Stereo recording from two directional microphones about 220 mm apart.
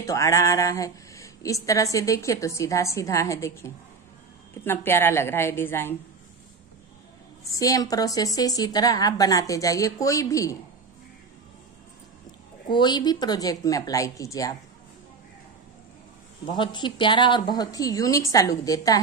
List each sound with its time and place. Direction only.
0.0 s speech: 15° left (ahead or behind)
7.5 s speech: 15° left (ahead or behind)
12.6 s speech: 20° left (ahead or behind)
16.4 s speech: 20° left (ahead or behind)